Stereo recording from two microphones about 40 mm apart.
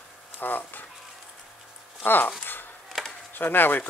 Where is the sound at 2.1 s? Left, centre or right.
Left.